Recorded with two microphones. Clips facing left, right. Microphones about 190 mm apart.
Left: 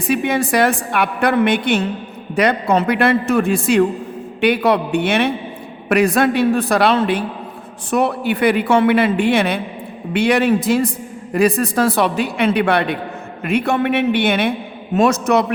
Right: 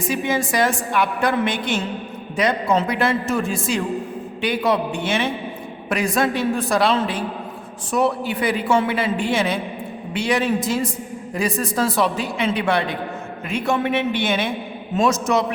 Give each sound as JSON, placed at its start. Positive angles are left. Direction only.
{"t": 0.0, "sound": "a woman's voice", "side_deg": 60}